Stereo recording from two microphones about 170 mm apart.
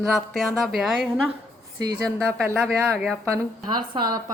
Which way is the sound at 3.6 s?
25° right (ahead or behind).